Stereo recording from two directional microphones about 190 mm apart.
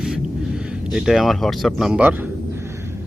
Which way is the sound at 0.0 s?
5° right (ahead or behind).